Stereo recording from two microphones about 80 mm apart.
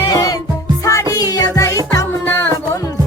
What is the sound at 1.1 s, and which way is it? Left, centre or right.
Music, left.